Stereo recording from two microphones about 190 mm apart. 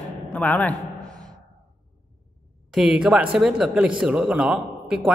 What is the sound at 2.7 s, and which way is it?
Speech, centre (ahead or behind).